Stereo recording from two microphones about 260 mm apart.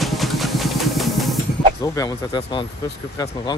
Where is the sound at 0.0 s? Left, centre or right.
Centre.